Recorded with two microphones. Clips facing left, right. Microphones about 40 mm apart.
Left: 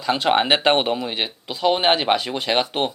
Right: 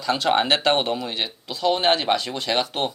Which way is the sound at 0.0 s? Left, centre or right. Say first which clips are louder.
Left 2 dB; centre.